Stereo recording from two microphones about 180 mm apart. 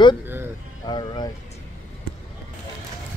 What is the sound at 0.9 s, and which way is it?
Speech, 25° left (ahead or behind).